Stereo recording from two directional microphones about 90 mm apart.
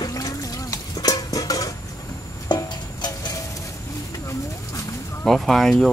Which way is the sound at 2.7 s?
55° left (ahead or behind).